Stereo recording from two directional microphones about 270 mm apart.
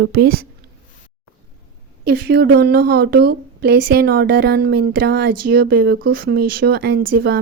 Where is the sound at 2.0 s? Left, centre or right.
Right.